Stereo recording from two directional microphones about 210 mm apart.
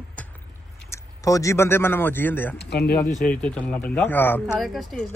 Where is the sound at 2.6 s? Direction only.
50° left (ahead or behind).